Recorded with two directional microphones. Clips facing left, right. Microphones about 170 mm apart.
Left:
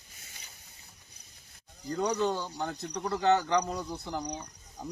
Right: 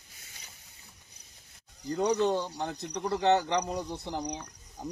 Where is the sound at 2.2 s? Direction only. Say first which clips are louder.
Right 2 dB; 20° right (ahead or behind).